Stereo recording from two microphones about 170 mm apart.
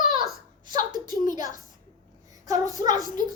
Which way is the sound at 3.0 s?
50° left (ahead or behind).